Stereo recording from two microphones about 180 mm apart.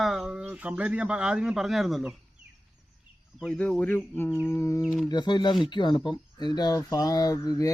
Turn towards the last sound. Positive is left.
turn(degrees=20)  # may be behind; listen again after turning